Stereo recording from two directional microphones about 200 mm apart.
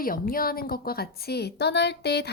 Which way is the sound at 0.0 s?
45° left (ahead or behind).